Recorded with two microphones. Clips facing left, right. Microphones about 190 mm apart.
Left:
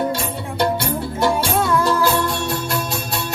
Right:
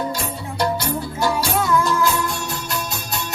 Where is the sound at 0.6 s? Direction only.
30° left (ahead or behind).